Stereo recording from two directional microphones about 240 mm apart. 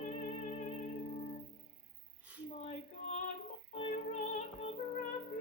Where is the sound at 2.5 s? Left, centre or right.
Left.